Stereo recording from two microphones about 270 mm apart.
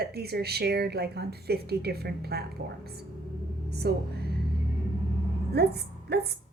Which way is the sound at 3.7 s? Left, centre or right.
Right.